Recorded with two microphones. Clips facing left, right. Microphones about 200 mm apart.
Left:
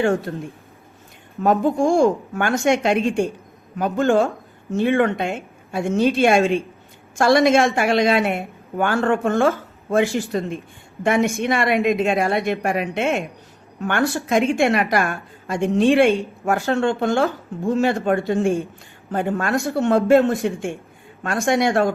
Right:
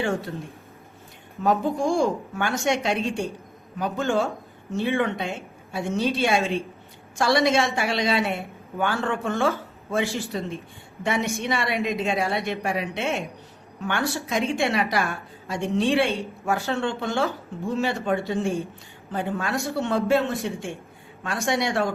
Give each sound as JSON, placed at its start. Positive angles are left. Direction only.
{"t": 1.4, "sound": "a woman's voice", "side_deg": 50}